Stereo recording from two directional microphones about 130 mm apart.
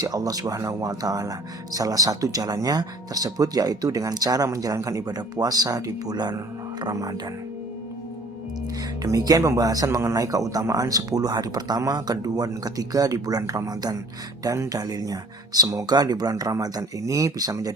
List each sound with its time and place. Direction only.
0.0 s speech: 30° right (ahead or behind)
9.0 s speech: 25° right (ahead or behind)